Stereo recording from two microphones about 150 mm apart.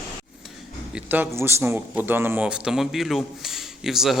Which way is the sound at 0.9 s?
10° right (ahead or behind).